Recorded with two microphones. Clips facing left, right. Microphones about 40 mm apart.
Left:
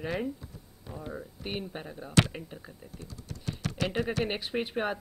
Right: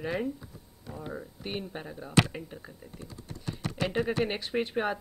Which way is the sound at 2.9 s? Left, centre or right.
Right.